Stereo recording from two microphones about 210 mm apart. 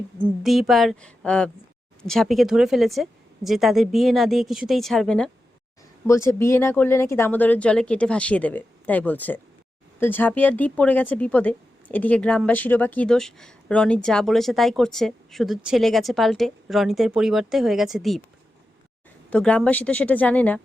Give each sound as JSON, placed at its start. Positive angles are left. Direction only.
{"t": 0.2, "sound": "speech", "side_deg": 0}
{"t": 19.3, "sound": "speech", "side_deg": 5}